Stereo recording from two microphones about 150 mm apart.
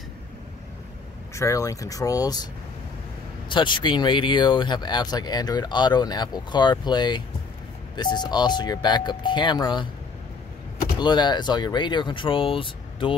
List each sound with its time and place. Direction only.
1.3 s speech: 20° left (ahead or behind)
3.4 s speech: 30° left (ahead or behind)
11.0 s speech: 30° left (ahead or behind)